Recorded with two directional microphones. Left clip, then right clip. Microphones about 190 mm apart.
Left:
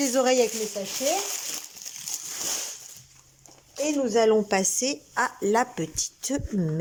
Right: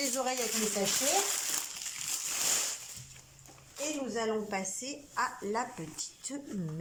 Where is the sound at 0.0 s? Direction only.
55° left (ahead or behind).